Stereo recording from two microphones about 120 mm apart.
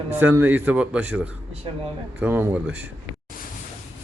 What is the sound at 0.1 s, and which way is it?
A man's voice, 15° right (ahead or behind).